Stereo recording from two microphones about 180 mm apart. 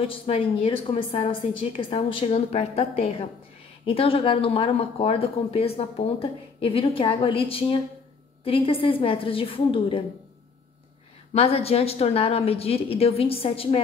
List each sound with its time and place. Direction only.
0.0 s a woman's voice: 30° left (ahead or behind)
11.3 s speech: 35° left (ahead or behind)